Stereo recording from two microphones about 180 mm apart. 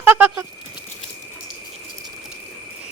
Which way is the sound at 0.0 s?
10° right (ahead or behind).